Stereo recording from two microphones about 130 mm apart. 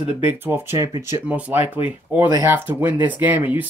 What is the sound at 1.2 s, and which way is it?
Speech, 10° right (ahead or behind).